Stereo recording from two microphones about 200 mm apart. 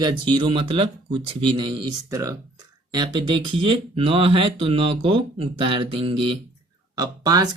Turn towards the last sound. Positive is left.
turn(degrees=-20)  # may be behind; listen again after turning